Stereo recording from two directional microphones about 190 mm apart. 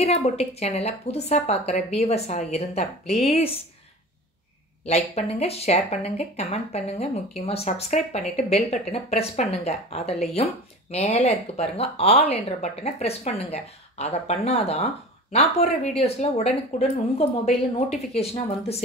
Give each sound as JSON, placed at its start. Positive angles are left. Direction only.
{"t": 0.0, "sound": "speech", "side_deg": 35}
{"t": 4.8, "sound": "speech", "side_deg": 35}